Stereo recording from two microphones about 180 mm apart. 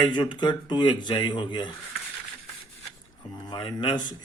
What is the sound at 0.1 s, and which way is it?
Speech, 25° left (ahead or behind).